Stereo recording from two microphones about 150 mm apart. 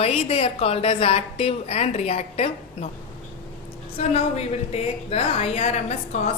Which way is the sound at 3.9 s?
45° left (ahead or behind).